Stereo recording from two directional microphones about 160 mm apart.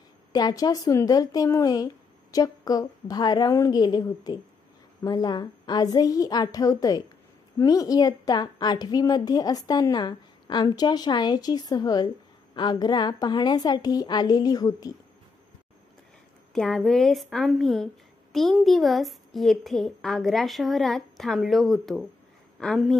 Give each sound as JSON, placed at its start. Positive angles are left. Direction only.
{"t": 0.3, "sound": "a woman's voice", "side_deg": 25}
{"t": 16.5, "sound": "speech", "side_deg": 5}